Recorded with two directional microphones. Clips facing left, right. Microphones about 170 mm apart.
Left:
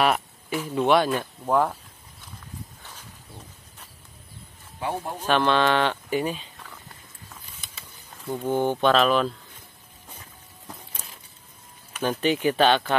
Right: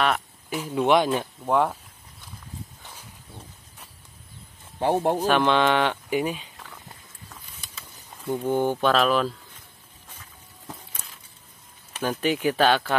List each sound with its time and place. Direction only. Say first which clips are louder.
0.0 s a sound: left 2 dB; 5° left (ahead or behind)
0.6 s speech: even; 15° right (ahead or behind)
1.4 s speech: even; centre (ahead or behind)
2.8 s a sound: even; 10° right (ahead or behind)
4.7 s speech: right 7 dB; 30° right (ahead or behind)
5.2 s speech: left 4 dB; 15° right (ahead or behind)
8.5 s speech: even; 10° left (ahead or behind)
8.8 s speech: left 3 dB; centre (ahead or behind)
12.0 s speech: left 1 dB; 5° right (ahead or behind)